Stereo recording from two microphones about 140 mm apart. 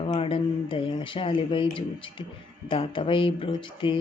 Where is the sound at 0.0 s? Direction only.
40° left (ahead or behind).